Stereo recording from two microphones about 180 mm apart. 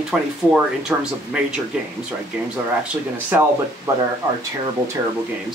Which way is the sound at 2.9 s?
10° right (ahead or behind).